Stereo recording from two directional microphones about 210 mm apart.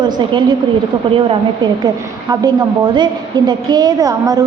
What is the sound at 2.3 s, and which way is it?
A woman's voice, 20° right (ahead or behind).